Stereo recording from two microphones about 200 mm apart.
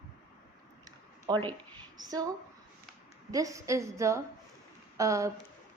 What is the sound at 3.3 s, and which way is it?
A woman's voice, 15° right (ahead or behind).